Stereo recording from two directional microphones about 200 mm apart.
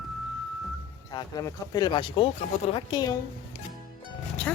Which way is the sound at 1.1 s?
15° left (ahead or behind).